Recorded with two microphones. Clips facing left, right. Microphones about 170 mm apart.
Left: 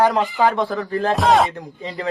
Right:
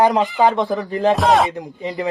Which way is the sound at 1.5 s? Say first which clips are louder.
Right 4 dB; 15° right (ahead or behind).